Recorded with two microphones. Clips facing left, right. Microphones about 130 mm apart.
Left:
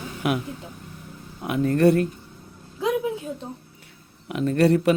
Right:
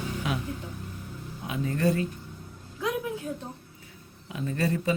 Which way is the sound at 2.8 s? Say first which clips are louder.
Left 6 dB; 20° left (ahead or behind).